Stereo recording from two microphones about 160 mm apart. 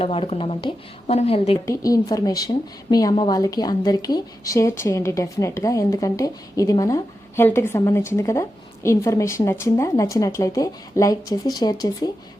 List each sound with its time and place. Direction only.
0.0 s speech: 35° left (ahead or behind)
1.6 s a woman's voice: 20° left (ahead or behind)